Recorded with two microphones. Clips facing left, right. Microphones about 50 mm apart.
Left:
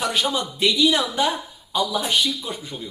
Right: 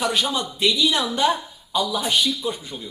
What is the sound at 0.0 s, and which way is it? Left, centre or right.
A woman's voice, left.